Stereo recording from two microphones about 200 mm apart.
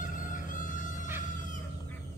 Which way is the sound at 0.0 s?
40° left (ahead or behind).